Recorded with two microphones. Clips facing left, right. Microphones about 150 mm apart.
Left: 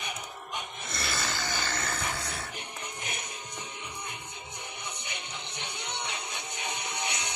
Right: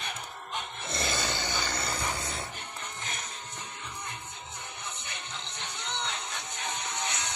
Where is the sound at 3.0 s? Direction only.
15° left (ahead or behind).